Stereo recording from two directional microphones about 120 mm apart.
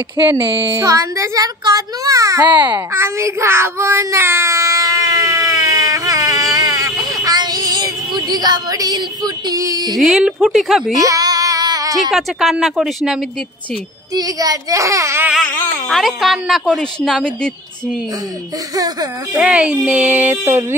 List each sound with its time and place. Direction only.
0.2 s a sound: 40° right (ahead or behind)
0.7 s a child's voice: 25° right (ahead or behind)
2.9 s a sound: 25° right (ahead or behind)
9.9 s a woman's voice: centre (ahead or behind)
11.0 s child singing: 30° right (ahead or behind)
12.1 s a woman's voice: centre (ahead or behind)
14.1 s a child's voice: 30° right (ahead or behind)
15.4 s a sound: 15° left (ahead or behind)
15.9 s a woman's voice: centre (ahead or behind)
19.3 s speech: 5° right (ahead or behind)